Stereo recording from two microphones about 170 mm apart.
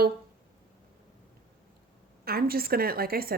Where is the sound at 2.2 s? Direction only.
65° right (ahead or behind).